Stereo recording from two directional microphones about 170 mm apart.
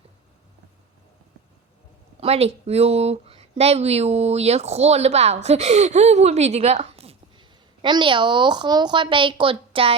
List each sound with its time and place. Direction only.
2.2 s speech: 35° right (ahead or behind)